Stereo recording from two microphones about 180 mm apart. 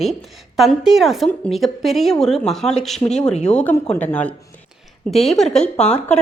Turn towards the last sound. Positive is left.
turn(degrees=5)  # may be behind; listen again after turning